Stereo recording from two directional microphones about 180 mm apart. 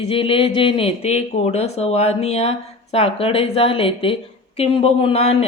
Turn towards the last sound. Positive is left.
turn(degrees=35)  # may be behind; listen again after turning